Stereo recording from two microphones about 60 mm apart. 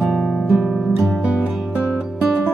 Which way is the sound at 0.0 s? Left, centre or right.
Centre.